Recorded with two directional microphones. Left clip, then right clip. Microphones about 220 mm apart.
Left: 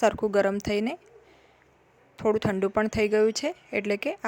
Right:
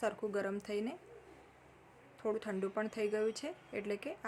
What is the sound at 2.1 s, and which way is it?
Speech, 40° left (ahead or behind).